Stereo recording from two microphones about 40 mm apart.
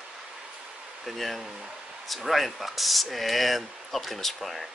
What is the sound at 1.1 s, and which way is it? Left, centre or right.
Speech, centre.